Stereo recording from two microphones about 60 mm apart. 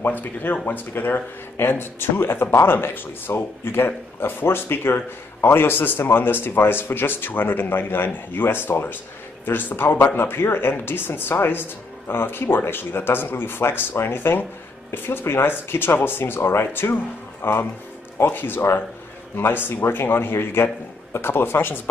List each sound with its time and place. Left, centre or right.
0.0 s speech: left